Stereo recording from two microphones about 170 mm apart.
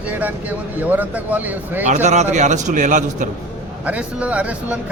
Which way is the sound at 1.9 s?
45° right (ahead or behind).